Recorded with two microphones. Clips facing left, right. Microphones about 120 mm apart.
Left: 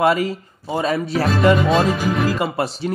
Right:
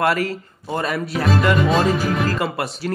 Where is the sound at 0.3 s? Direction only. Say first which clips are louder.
Left 1 dB; 10° left (ahead or behind).